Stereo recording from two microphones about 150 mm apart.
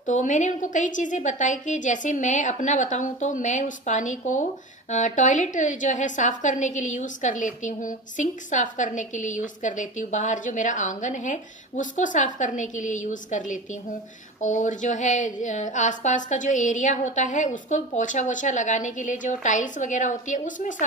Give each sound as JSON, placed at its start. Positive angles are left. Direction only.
{"t": 0.0, "sound": "a woman's voice", "side_deg": 55}